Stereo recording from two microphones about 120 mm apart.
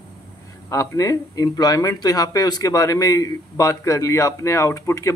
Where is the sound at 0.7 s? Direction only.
25° left (ahead or behind).